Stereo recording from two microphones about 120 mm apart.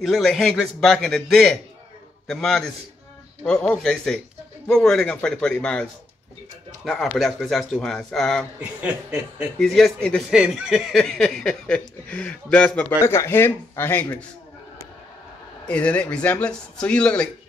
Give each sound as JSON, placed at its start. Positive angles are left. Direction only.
{"t": 0.0, "sound": "speech", "side_deg": 0}
{"t": 8.5, "sound": "a man's voice", "side_deg": -10}
{"t": 9.6, "sound": "speech", "side_deg": 5}
{"t": 13.0, "sound": "speech", "side_deg": 20}
{"t": 15.6, "sound": "speech", "side_deg": 10}